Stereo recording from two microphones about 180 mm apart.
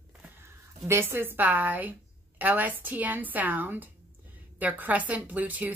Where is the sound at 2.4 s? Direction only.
10° right (ahead or behind).